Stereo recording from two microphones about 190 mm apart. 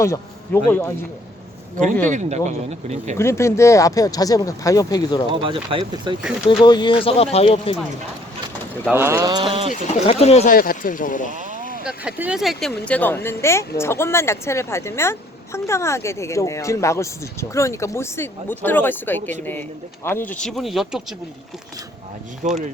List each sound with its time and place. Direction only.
0.0 s speech: 15° left (ahead or behind)
2.0 s speech: 40° right (ahead or behind)
3.2 s speech: 15° left (ahead or behind)
5.3 s speech: 25° right (ahead or behind)
6.6 s speech: 25° left (ahead or behind)
8.9 s speech: 15° right (ahead or behind)
9.6 s speech: 35° left (ahead or behind)
10.5 s speech: 50° left (ahead or behind)
11.3 s vehicle: 40° right (ahead or behind)
11.9 s speech: 5° right (ahead or behind)
22.4 s speech: 40° right (ahead or behind)